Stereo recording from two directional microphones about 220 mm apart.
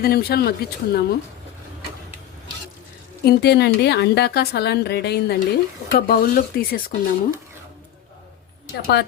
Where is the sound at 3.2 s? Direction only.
45° left (ahead or behind).